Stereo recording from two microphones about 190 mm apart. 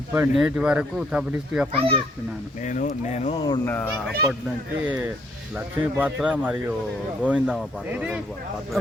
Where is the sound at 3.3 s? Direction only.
25° left (ahead or behind).